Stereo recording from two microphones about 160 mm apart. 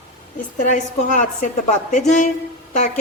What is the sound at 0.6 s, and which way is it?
A woman's voice, 50° left (ahead or behind).